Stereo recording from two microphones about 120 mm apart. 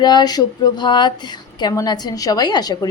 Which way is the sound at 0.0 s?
35° left (ahead or behind).